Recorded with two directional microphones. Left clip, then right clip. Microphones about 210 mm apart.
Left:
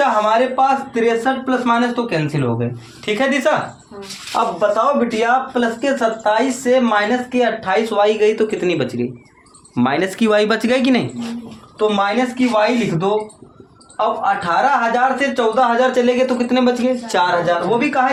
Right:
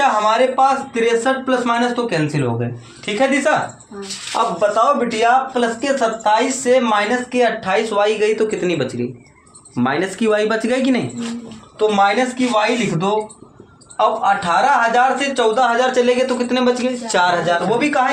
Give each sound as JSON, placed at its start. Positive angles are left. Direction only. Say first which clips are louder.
{"t": 0.0, "sound": "speech", "louder": "even", "side_deg": 15}
{"t": 3.1, "sound": "speech", "louder": "even", "side_deg": 25}
{"t": 4.3, "sound": "speech", "louder": "even", "side_deg": 15}
{"t": 11.8, "sound": "speech", "louder": "right 2 dB", "side_deg": 15}